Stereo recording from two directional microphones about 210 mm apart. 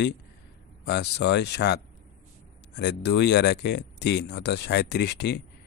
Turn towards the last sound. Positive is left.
turn(degrees=50)  # may be behind; listen again after turning